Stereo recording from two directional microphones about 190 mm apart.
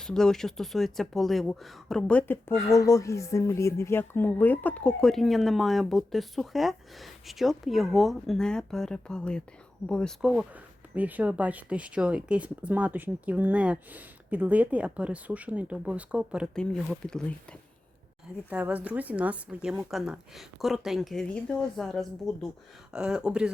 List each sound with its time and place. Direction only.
0.0 s speech: 5° left (ahead or behind)
18.4 s speech: 10° right (ahead or behind)